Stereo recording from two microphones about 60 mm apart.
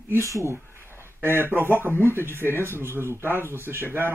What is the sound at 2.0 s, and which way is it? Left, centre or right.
Speech, right.